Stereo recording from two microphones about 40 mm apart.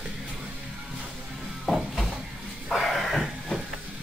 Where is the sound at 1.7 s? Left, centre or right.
Centre.